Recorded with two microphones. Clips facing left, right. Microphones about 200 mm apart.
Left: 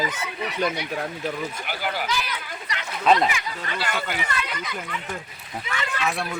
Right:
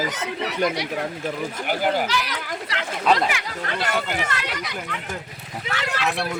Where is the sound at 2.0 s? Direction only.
85° right.